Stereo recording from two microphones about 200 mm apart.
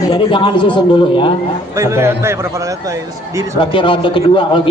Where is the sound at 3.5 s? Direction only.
25° left (ahead or behind).